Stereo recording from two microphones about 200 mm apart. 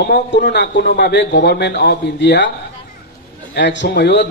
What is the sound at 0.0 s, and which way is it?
A man's voice, 55° left (ahead or behind).